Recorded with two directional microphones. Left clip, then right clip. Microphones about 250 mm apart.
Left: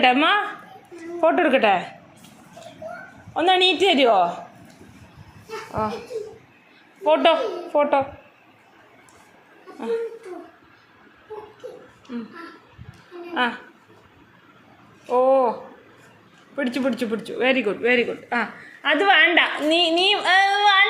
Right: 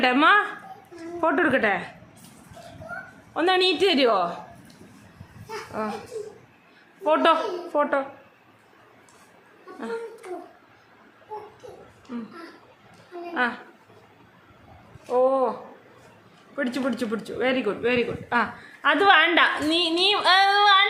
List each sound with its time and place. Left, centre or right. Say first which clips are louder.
0.0 s a man's voice: left 1 dB; centre
3.3 s a man's voice: left 3 dB; centre
5.8 s a man's voice: left 5 dB; centre
7.0 s a woman's voice: left 3 dB; centre
15.0 s a man's voice: left 4 dB; centre
16.6 s a man's voice: left 3 dB; centre